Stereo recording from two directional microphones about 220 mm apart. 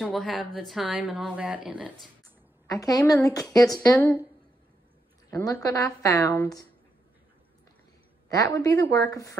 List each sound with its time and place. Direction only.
0.0 s speech: centre (ahead or behind)
2.6 s a woman's voice: 15° left (ahead or behind)
5.3 s a woman's voice: 15° left (ahead or behind)
8.3 s a woman's voice: 15° left (ahead or behind)